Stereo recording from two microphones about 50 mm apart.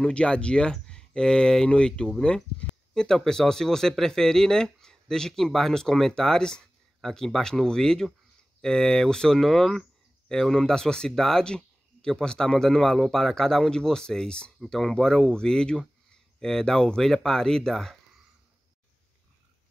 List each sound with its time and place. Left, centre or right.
0.0 s speech: centre